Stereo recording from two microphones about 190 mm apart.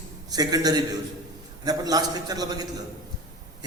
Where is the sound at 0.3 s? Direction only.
20° right (ahead or behind).